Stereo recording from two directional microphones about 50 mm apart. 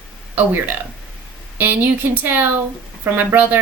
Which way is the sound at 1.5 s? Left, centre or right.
Right.